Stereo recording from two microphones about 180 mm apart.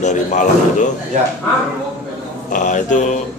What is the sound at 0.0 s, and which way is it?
Speech, 45° left (ahead or behind).